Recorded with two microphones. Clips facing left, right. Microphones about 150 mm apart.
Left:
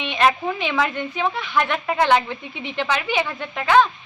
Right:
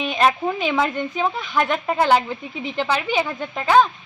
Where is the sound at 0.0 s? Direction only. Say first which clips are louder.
Right 1 dB; 40° right (ahead or behind).